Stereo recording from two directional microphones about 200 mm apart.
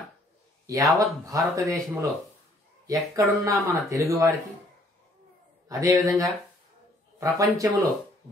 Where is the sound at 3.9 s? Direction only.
15° right (ahead or behind).